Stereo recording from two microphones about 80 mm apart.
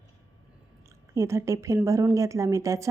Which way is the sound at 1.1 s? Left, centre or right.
Right.